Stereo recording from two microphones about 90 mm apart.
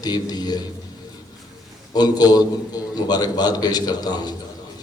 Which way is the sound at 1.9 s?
50° left (ahead or behind).